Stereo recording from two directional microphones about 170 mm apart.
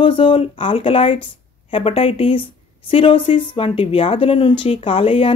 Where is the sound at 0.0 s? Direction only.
30° left (ahead or behind).